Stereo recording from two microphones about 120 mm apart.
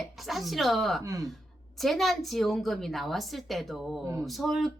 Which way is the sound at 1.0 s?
25° right (ahead or behind).